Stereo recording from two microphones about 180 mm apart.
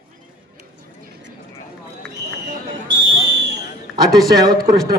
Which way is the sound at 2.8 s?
75° right (ahead or behind).